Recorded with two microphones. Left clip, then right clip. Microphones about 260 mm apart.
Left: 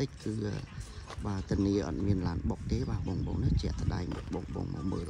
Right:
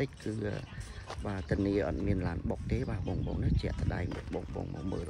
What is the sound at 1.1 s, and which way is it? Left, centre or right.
Speech, centre.